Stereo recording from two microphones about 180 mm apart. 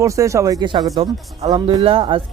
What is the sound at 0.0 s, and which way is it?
Speech, 15° right (ahead or behind).